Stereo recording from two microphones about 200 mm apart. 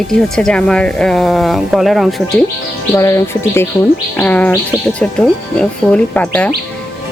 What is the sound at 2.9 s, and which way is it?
Speech, 15° left (ahead or behind).